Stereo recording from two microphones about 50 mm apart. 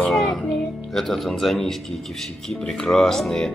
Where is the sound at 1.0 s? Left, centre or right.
Centre.